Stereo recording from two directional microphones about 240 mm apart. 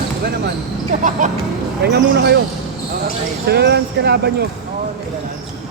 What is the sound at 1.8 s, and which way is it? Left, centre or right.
Speech, right.